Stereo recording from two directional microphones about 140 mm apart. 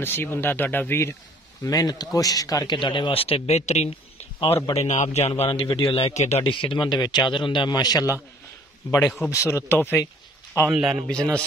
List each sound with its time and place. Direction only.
0.0 s speech: 15° left (ahead or behind)
1.6 s speech: 25° left (ahead or behind); by 4.6 s 45° left (ahead or behind)
4.7 s speech: 55° left (ahead or behind)
6.5 s speech: 35° left (ahead or behind)
9.3 s speech: 20° left (ahead or behind)
10.7 s a man's voice: 5° right (ahead or behind)